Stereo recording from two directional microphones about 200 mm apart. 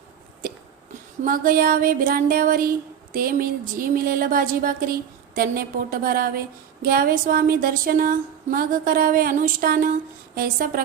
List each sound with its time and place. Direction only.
1.2 s speech: 45° right (ahead or behind)